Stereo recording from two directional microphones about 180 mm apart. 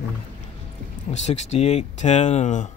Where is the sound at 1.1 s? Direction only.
40° left (ahead or behind).